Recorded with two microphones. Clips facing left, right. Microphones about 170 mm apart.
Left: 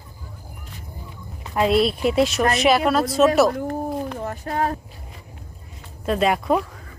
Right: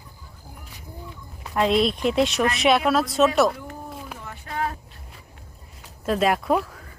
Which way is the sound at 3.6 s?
50° left (ahead or behind).